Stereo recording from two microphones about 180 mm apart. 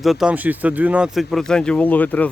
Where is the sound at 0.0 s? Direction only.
Centre (ahead or behind).